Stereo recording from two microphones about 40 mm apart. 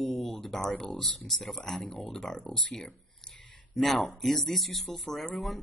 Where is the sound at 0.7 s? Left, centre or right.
Centre.